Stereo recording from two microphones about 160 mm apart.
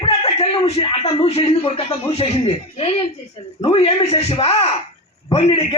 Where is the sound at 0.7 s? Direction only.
40° left (ahead or behind).